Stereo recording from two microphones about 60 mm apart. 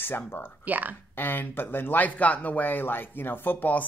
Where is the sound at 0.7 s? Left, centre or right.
Right.